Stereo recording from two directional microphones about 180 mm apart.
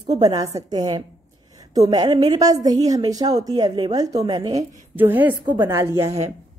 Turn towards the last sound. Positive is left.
turn(degrees=-15)  # may be behind; listen again after turning